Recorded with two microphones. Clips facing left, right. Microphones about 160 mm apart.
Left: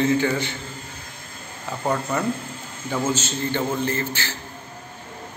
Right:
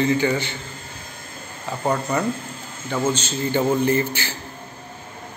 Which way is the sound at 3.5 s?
15° right (ahead or behind).